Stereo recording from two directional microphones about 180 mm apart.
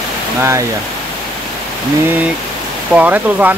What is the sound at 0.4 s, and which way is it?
Speech, 15° right (ahead or behind).